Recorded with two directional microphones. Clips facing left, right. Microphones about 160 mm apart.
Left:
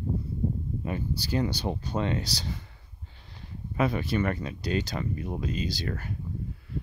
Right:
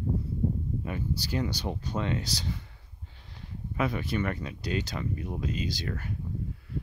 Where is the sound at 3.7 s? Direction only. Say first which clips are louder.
Left 3 dB; 35° left (ahead or behind).